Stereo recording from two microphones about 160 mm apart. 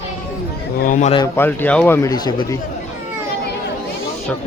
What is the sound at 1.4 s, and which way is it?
Speech, 10° left (ahead or behind).